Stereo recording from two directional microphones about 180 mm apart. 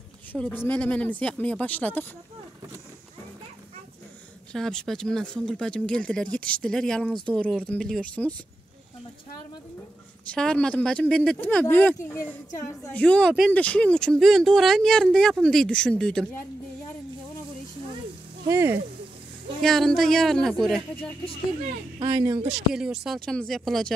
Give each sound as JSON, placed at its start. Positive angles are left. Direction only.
{"t": 0.3, "sound": "speech", "side_deg": 10}
{"t": 4.5, "sound": "speech", "side_deg": 5}
{"t": 10.3, "sound": "speech", "side_deg": 5}
{"t": 18.5, "sound": "speech", "side_deg": -15}
{"t": 19.6, "sound": "speech", "side_deg": 0}
{"t": 22.0, "sound": "speech", "side_deg": -25}
{"t": 22.7, "sound": "speech", "side_deg": -5}